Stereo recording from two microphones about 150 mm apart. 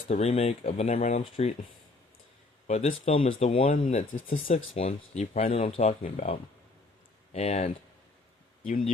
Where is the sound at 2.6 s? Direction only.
50° left (ahead or behind).